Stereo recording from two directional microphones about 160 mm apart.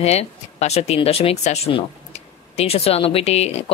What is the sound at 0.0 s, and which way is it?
Speech, 40° left (ahead or behind).